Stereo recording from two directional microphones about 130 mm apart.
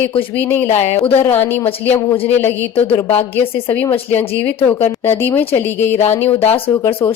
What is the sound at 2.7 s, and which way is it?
Speech, 45° left (ahead or behind).